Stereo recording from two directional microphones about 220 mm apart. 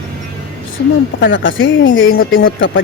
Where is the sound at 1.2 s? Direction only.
60° left (ahead or behind).